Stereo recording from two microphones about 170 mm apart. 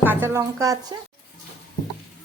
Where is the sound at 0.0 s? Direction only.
15° right (ahead or behind).